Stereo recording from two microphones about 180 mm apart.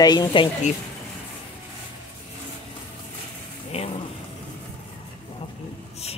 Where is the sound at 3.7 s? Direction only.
35° left (ahead or behind).